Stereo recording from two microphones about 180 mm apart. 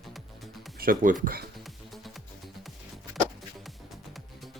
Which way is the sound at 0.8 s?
50° right (ahead or behind).